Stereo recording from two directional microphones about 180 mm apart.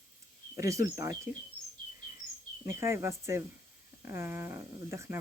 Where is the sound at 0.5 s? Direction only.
15° right (ahead or behind).